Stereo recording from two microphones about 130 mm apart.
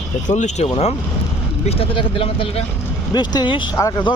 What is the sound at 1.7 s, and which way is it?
Speech, 45° left (ahead or behind).